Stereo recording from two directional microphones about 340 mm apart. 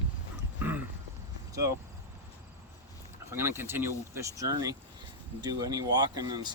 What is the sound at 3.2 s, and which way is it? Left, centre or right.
Speech, centre.